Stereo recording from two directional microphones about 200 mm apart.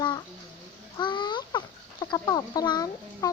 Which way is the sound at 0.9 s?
20° left (ahead or behind).